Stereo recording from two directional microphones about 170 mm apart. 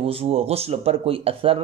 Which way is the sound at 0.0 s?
35° right (ahead or behind).